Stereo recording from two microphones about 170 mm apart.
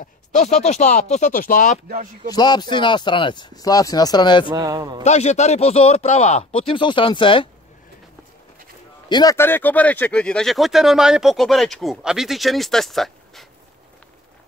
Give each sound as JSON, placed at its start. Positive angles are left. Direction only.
{"t": 0.0, "sound": "speech", "side_deg": 45}
{"t": 2.3, "sound": "speech", "side_deg": 25}
{"t": 4.5, "sound": "a man's voice", "side_deg": -20}
{"t": 5.0, "sound": "speech", "side_deg": 40}
{"t": 9.1, "sound": "speech", "side_deg": 20}